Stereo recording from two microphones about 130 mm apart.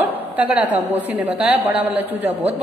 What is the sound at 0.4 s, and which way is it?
A woman's voice, 10° right (ahead or behind).